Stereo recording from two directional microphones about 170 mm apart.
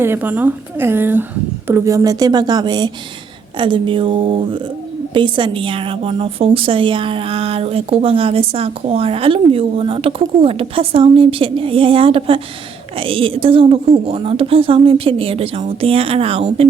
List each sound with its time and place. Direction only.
0.0 s a woman's voice: 10° right (ahead or behind); by 16.6 s 35° right (ahead or behind)